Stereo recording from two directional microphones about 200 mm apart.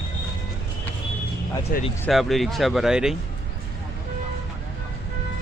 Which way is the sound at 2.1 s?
Centre (ahead or behind).